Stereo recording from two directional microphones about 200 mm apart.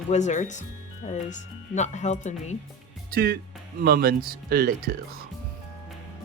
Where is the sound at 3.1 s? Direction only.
50° right (ahead or behind).